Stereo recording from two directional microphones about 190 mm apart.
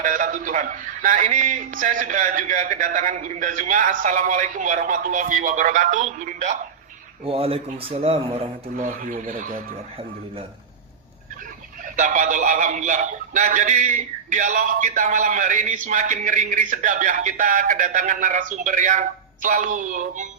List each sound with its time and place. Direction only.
0.0 s music: 45° right (ahead or behind)
7.3 s speech: 30° right (ahead or behind)
9.0 s music: 45° right (ahead or behind)
11.9 s music: 40° right (ahead or behind)